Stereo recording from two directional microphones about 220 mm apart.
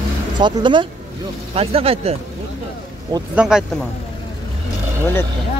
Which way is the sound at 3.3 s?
5° right (ahead or behind).